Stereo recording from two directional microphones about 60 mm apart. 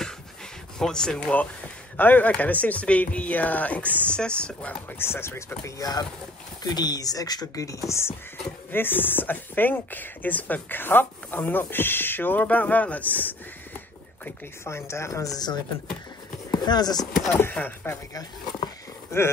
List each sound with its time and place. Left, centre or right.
0.7 s speech: centre
2.0 s speech: left
4.9 s speech: left
5.8 s speech: left
8.7 s speech: left
14.6 s speech: left
16.4 s speech: left
17.3 s speech: left
19.1 s speech: left